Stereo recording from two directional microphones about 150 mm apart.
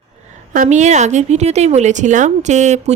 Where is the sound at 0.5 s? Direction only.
55° right (ahead or behind).